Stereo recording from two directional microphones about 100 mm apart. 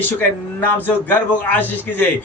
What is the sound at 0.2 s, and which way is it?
A man's voice, 20° left (ahead or behind).